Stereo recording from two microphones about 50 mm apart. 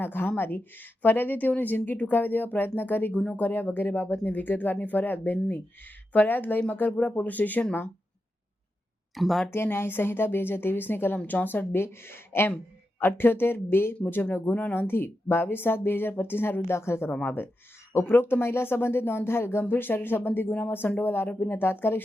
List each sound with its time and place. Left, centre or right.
0.0 s a woman's voice: left
9.1 s speech: centre
9.5 s a woman's voice: left
14.0 s a woman's voice: left
14.8 s a woman's voice: left
17.2 s a woman's voice: left
19.6 s a woman's voice: left